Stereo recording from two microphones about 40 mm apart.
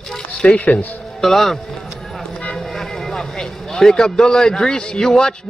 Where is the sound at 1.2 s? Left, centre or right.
Centre.